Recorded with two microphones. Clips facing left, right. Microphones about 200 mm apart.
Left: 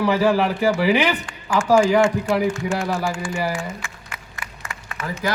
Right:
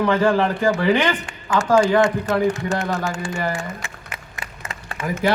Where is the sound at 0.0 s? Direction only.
5° left (ahead or behind).